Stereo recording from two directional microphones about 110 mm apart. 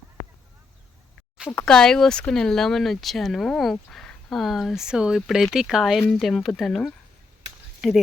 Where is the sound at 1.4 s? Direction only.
10° left (ahead or behind).